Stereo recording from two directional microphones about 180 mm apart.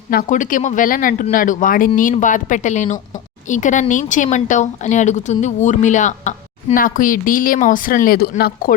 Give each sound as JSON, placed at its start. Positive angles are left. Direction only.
{"t": 0.1, "sound": "a woman's voice", "side_deg": 50}